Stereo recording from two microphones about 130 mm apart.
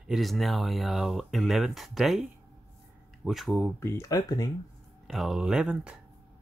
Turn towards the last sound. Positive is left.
turn(degrees=-5)  # may be behind; listen again after turning